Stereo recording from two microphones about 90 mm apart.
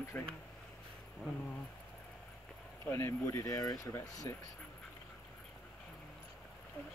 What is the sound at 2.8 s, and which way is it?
Speech, 30° left (ahead or behind).